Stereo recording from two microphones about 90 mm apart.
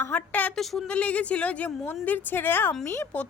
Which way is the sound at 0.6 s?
Centre (ahead or behind).